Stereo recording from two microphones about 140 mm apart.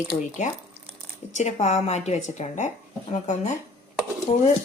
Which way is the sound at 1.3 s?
55° left (ahead or behind).